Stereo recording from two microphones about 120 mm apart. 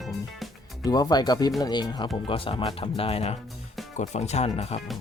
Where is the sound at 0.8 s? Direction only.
35° left (ahead or behind).